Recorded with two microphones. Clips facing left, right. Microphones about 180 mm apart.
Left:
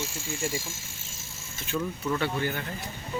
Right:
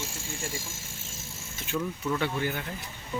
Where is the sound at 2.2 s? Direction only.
15° right (ahead or behind).